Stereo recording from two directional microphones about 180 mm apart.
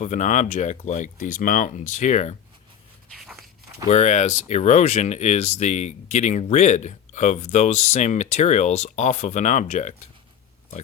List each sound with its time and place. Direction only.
0.0 s speech: 45° left (ahead or behind)
3.1 s walk: centre (ahead or behind)
3.8 s speech: 40° left (ahead or behind)